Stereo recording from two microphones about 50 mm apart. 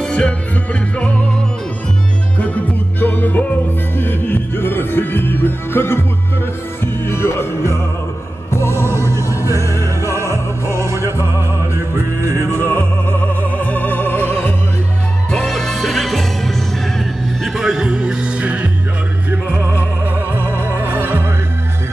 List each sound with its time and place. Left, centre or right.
0.0 s music: centre
2.3 s music: left
8.8 s music: right
9.3 s music: left
10.0 s music: right
12.5 s opera: left
15.3 s music: centre
17.6 s music: centre
20.3 s music: right